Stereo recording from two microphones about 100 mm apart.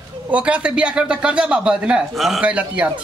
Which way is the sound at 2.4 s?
15° right (ahead or behind).